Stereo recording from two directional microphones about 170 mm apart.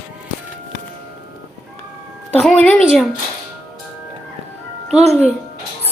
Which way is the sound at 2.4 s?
10° left (ahead or behind).